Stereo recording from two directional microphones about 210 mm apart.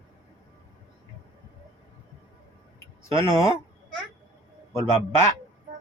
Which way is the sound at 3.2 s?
15° left (ahead or behind).